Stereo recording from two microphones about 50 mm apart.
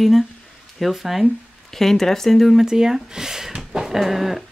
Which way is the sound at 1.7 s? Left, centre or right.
Centre.